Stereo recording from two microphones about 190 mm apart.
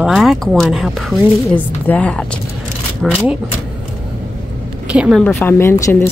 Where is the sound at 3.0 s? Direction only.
5° right (ahead or behind).